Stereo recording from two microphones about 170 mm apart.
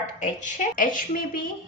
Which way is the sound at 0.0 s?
45° left (ahead or behind).